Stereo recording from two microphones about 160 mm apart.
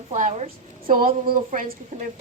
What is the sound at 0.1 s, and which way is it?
Speech, 50° right (ahead or behind).